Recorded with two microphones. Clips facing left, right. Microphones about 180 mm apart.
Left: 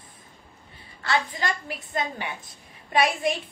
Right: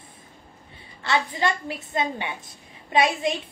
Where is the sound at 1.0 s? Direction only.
25° right (ahead or behind).